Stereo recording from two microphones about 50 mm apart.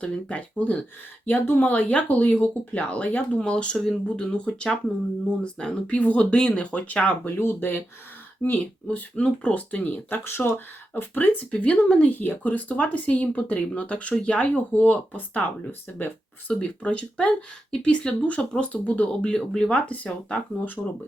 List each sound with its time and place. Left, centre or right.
0.0 s speech: left
6.0 s speech: left
6.3 s speech: left
8.5 s speech: left
10.2 s speech: left
16.5 s speech: left